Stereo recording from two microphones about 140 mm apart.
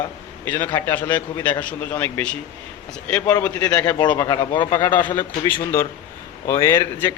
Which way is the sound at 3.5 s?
25° left (ahead or behind).